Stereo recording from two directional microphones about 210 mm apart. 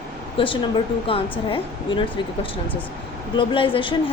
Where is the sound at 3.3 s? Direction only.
25° left (ahead or behind).